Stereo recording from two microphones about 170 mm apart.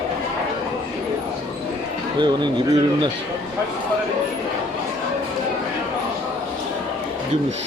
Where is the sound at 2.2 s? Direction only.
25° right (ahead or behind).